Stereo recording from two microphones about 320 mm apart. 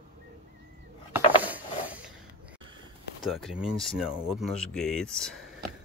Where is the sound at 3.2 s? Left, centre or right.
Centre.